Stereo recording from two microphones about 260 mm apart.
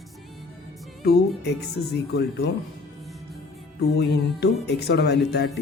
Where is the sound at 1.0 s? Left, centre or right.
Left.